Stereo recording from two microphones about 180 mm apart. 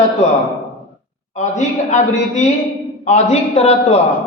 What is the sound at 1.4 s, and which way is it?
A man's voice, 40° left (ahead or behind).